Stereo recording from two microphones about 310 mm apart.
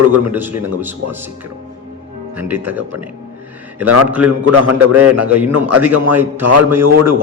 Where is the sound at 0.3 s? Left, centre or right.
Centre.